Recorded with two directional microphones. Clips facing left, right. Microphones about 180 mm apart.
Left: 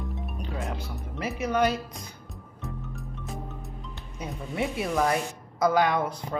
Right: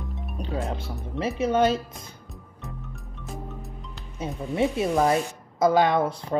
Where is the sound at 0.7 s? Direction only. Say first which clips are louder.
Right 3 dB; 25° right (ahead or behind).